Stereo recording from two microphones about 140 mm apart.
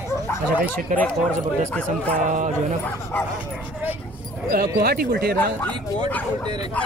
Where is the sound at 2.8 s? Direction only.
10° left (ahead or behind).